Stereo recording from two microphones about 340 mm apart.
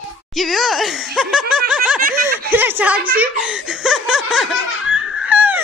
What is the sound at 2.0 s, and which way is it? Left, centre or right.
Speech, right.